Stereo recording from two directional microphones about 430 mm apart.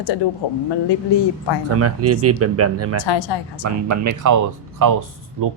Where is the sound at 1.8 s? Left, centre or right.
Right.